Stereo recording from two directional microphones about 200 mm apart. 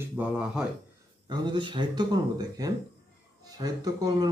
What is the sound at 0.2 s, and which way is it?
Speech, 10° right (ahead or behind).